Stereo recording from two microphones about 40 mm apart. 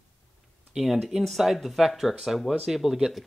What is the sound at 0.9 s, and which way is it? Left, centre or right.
Speech, centre.